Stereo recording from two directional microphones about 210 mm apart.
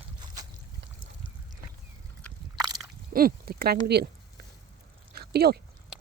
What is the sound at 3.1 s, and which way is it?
Speech, 45° right (ahead or behind).